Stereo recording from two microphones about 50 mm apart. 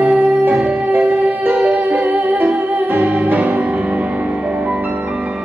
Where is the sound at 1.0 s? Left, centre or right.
Right.